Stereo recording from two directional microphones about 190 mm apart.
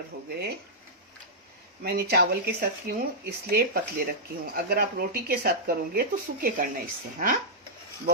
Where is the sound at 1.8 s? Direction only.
55° right (ahead or behind).